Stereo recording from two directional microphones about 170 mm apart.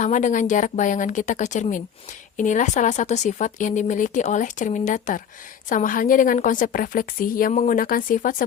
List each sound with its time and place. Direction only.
0.0 s a woman's voice: 45° left (ahead or behind)